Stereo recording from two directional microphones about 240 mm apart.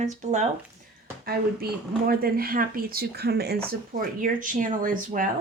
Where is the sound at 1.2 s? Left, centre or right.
Right.